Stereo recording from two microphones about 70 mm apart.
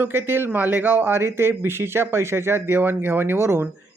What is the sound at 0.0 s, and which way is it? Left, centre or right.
Speech, right.